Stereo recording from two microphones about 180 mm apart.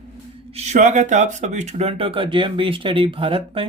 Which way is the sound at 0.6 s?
40° right (ahead or behind).